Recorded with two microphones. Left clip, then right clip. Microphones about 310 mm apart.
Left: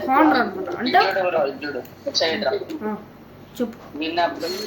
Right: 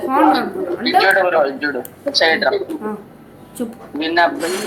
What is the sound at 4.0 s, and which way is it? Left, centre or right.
Speech, right.